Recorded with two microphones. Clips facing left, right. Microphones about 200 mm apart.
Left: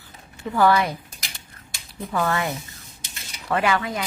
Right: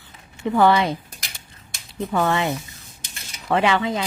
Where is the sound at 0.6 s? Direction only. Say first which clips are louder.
Right 2 dB; 25° right (ahead or behind).